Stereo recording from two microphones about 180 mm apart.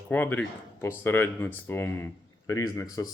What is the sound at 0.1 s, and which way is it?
Speech, 10° left (ahead or behind).